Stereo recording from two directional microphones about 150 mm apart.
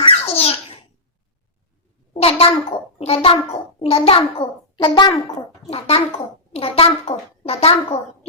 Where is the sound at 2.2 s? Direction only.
40° left (ahead or behind).